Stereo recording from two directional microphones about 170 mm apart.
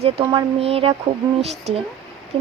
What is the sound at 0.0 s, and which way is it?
Speech, 30° right (ahead or behind).